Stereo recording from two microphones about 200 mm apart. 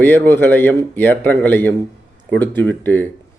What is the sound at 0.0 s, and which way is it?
A man's voice, 10° left (ahead or behind).